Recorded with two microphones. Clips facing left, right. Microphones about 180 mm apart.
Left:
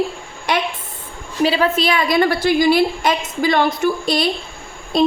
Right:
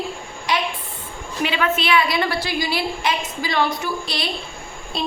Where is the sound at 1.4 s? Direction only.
35° left (ahead or behind).